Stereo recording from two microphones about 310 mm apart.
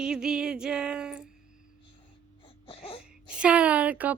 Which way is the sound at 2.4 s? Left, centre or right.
Centre.